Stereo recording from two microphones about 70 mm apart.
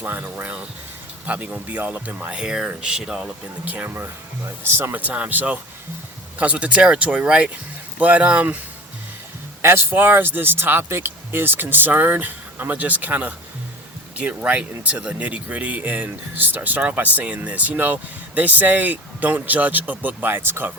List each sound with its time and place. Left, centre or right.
0.0 s speech: right
2.3 s speech: centre
9.6 s speech: right